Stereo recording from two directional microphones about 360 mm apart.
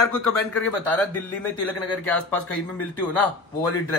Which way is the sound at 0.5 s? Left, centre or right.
Centre.